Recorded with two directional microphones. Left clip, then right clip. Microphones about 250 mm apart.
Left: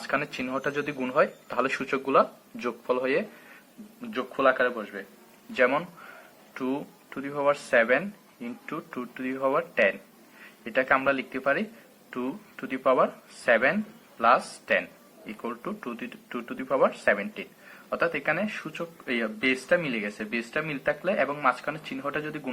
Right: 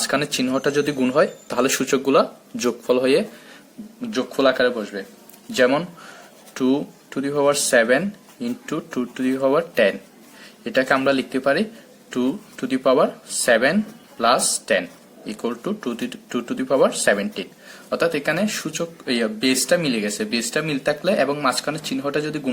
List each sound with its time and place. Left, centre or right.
0.1 s speech: right
6.5 s a sound: right
7.1 s speech: right